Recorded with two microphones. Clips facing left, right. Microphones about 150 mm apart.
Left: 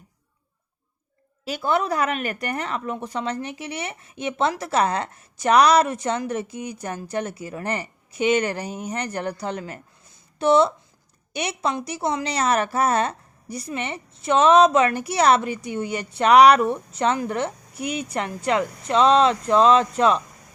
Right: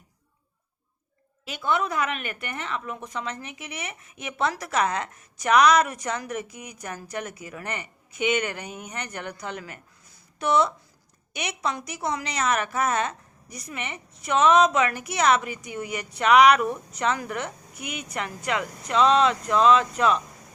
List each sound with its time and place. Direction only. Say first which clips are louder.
1.5 s a woman's voice: left 4 dB; 35° left (ahead or behind)